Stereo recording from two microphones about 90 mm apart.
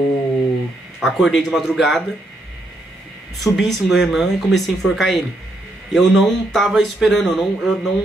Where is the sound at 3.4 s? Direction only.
Centre (ahead or behind).